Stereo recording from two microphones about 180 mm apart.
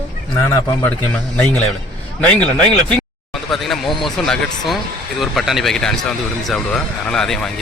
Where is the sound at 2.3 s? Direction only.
5° left (ahead or behind).